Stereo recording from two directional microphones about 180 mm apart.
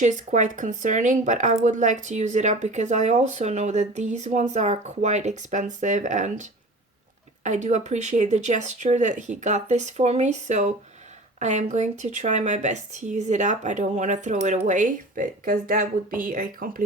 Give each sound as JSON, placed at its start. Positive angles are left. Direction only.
{"t": 0.0, "sound": "speech", "side_deg": -45}